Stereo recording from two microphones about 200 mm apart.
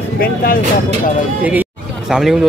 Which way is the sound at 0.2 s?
45° left (ahead or behind).